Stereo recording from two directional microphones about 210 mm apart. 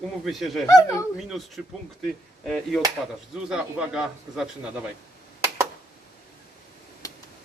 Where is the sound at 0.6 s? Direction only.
15° left (ahead or behind).